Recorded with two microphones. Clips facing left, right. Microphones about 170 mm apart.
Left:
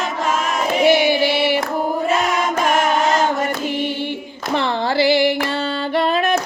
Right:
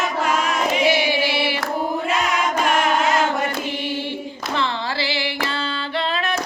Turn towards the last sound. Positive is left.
turn(degrees=50)  # may be behind; listen again after turning